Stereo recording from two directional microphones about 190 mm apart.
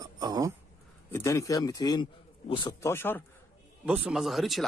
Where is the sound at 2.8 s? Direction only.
10° left (ahead or behind).